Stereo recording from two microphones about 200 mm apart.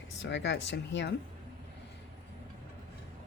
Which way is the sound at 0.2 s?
65° left (ahead or behind).